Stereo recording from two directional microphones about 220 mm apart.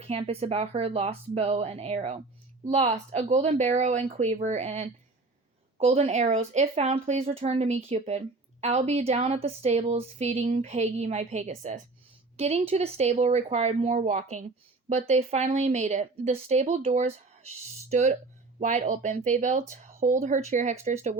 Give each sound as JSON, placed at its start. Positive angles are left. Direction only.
{"t": 0.0, "sound": "a woman's voice", "side_deg": -25}